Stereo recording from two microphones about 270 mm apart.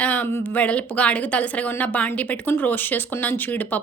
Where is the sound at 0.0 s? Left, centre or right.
Centre.